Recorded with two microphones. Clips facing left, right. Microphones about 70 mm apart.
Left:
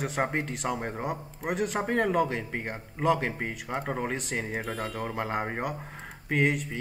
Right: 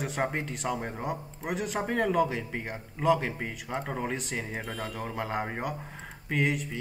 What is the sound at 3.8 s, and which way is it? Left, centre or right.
Speech, centre.